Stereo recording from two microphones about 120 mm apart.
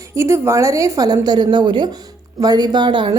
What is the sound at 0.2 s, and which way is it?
A woman's voice, 25° right (ahead or behind).